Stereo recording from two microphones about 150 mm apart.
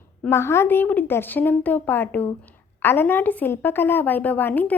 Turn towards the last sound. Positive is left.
turn(degrees=10)  # may be behind; listen again after turning